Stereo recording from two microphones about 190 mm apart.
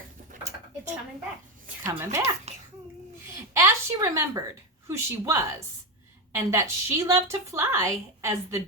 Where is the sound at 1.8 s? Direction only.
10° right (ahead or behind).